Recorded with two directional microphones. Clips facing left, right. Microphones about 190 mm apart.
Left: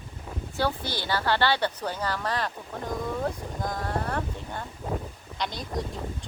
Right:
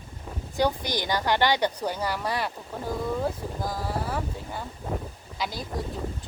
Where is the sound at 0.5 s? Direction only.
15° right (ahead or behind).